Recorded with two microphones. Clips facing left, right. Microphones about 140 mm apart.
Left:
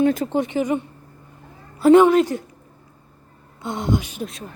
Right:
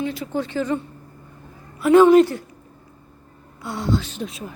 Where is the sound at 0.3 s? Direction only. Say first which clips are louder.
Left 2 dB; 20° left (ahead or behind).